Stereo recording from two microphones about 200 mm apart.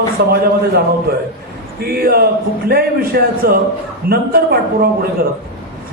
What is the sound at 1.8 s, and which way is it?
A man's voice, 50° right (ahead or behind).